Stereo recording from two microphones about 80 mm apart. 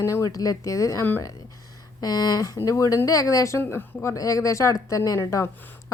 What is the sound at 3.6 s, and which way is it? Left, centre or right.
Speech, left.